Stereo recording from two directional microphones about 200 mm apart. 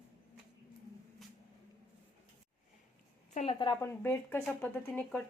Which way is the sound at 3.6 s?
20° left (ahead or behind).